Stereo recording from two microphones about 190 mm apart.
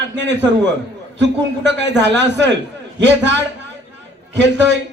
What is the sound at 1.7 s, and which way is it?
A man's voice, 65° right (ahead or behind).